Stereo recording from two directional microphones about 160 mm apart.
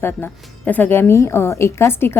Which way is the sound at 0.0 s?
10° left (ahead or behind).